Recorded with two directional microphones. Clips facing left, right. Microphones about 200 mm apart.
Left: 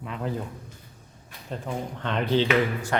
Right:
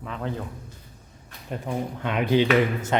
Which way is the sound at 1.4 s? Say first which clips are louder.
Right 3 dB; 10° right (ahead or behind).